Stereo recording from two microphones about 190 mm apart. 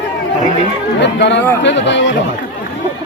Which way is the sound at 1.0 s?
65° left (ahead or behind).